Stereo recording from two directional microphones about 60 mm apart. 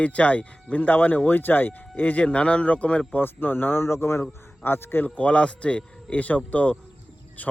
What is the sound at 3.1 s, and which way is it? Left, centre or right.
A man's voice, left.